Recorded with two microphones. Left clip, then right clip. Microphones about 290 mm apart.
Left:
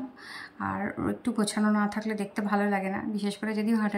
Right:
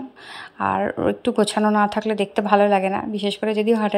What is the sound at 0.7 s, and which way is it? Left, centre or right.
Speech, right.